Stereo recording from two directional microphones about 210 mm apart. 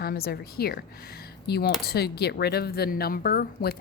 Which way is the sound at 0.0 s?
45° left (ahead or behind).